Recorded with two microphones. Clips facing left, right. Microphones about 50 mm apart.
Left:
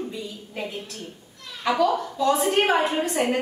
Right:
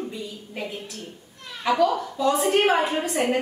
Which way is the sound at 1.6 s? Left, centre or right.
Centre.